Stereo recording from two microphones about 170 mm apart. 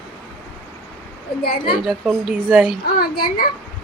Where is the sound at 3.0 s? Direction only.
60° left (ahead or behind).